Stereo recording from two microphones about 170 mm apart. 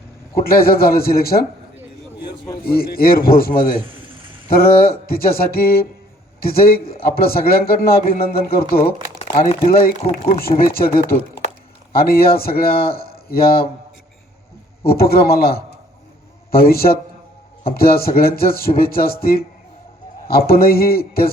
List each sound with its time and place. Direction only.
0.3 s speech: 60° left (ahead or behind)
2.7 s speech: 60° left (ahead or behind)
9.5 s speech: 35° left (ahead or behind)
10.2 s speech: 60° left (ahead or behind)
13.1 s a sound: 60° left (ahead or behind)
14.8 s speech: 65° left (ahead or behind)
16.6 s speech: 60° left (ahead or behind)